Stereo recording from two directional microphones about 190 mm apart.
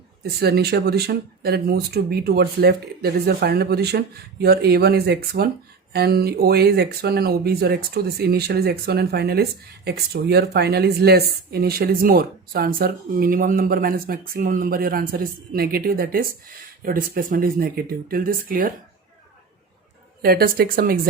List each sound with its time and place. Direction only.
0.3 s speech: 55° right (ahead or behind)
20.2 s speech: 55° right (ahead or behind)